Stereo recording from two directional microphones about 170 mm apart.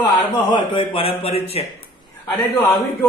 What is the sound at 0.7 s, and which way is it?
Speech, 30° left (ahead or behind).